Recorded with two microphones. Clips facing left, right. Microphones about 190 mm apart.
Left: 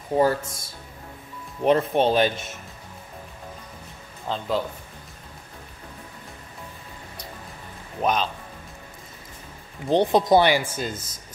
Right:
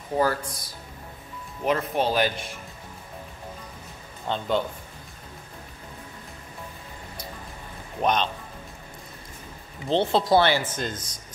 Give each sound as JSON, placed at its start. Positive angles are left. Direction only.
{"t": 0.1, "sound": "speech", "side_deg": 25}
{"t": 4.3, "sound": "speech", "side_deg": 0}
{"t": 8.0, "sound": "speech", "side_deg": 5}
{"t": 9.8, "sound": "speech", "side_deg": 15}